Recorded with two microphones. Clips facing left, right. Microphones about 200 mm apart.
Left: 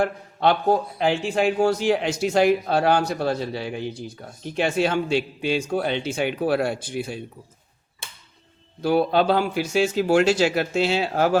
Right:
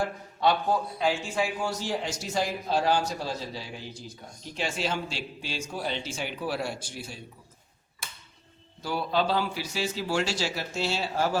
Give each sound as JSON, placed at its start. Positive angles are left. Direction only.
{"t": 0.0, "sound": "a man's voice", "side_deg": 65}
{"t": 8.8, "sound": "a man's voice", "side_deg": 60}